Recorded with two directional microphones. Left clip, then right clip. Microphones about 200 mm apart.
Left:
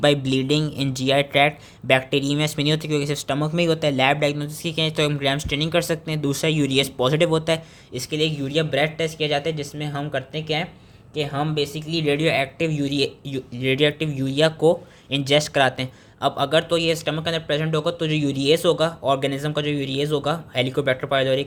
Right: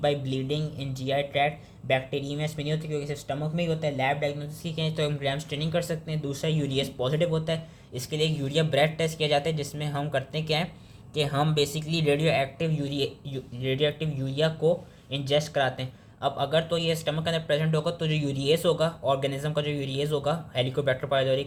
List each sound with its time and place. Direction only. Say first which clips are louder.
0.0 s speech: left 8 dB; 40° left (ahead or behind)
7.9 s speech: left 5 dB; 15° left (ahead or behind)